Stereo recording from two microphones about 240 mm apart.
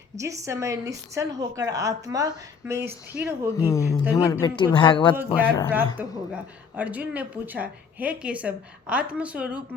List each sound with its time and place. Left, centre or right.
0.2 s a woman's voice: centre
3.6 s speech: centre
5.1 s a woman's voice: centre